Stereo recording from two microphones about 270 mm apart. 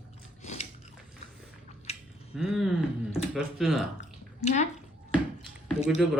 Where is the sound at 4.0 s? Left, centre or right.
Left.